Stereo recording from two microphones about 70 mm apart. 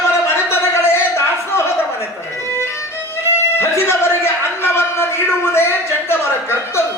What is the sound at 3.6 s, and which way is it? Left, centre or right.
A man's voice, left.